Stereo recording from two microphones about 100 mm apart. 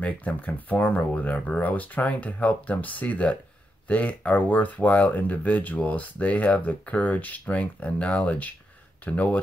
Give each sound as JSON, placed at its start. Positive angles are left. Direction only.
{"t": 0.0, "sound": "speech", "side_deg": 15}